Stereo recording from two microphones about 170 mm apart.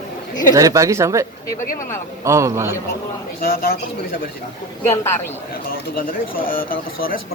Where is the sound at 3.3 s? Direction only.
60° left (ahead or behind).